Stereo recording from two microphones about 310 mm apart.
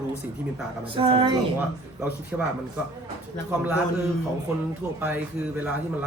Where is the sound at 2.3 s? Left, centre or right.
Centre.